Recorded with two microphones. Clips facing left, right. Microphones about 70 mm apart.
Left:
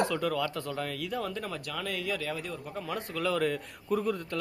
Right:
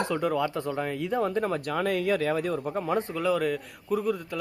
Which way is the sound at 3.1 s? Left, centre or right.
Centre.